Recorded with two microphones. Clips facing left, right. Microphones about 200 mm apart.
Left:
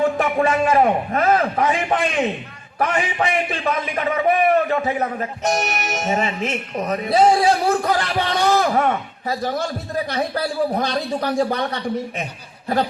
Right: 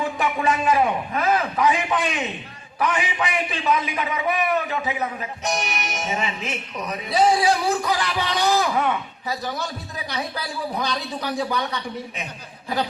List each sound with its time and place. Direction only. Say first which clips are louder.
0.0 s a man's voice: left 5 dB; 50° left (ahead or behind)